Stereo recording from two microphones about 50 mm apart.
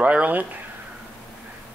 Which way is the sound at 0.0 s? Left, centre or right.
Right.